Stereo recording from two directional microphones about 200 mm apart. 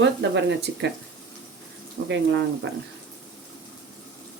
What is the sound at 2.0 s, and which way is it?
Speech, 65° right (ahead or behind).